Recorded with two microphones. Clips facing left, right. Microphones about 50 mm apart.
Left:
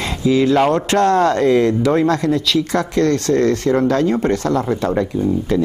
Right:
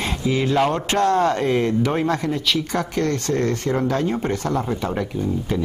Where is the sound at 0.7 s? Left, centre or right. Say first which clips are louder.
Left 4 dB; left.